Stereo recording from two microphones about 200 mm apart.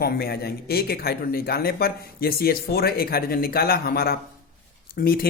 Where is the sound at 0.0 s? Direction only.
50° left (ahead or behind).